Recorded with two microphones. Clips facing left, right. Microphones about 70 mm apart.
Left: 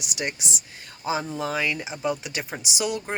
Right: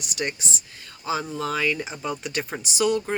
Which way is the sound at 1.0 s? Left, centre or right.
Left.